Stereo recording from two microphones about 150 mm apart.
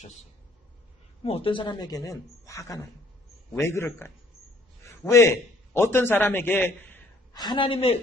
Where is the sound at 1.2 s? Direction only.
40° left (ahead or behind); by 7.0 s 15° left (ahead or behind).